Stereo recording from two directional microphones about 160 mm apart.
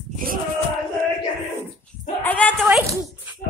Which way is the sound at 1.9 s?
10° left (ahead or behind).